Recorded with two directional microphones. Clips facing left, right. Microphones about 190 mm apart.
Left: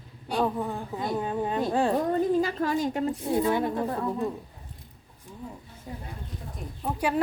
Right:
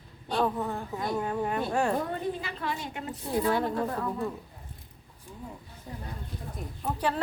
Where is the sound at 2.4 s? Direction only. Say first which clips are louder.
Left 9 dB; 40° left (ahead or behind).